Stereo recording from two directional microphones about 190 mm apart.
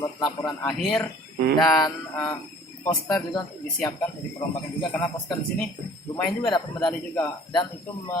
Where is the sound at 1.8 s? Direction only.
10° left (ahead or behind).